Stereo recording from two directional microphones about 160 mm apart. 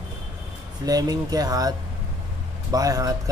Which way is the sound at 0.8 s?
25° right (ahead or behind).